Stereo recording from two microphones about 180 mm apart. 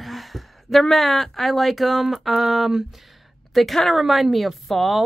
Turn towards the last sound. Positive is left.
turn(degrees=0)  # may be behind; listen again after turning